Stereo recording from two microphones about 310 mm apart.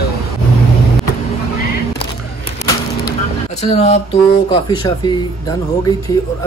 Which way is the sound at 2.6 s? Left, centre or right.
Centre.